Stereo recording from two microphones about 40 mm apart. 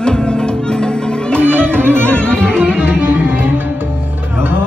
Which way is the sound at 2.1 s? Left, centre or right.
Left.